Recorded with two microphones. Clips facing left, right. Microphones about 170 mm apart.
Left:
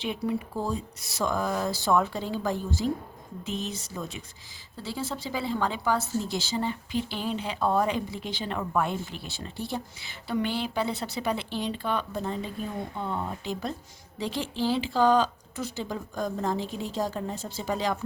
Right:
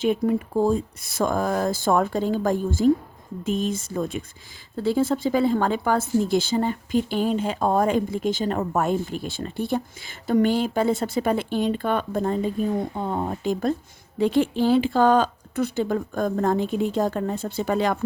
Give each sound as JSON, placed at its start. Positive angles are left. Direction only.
{"t": 0.0, "sound": "a woman's voice", "side_deg": -50}